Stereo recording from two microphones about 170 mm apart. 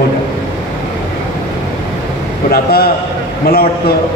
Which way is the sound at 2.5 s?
60° left (ahead or behind).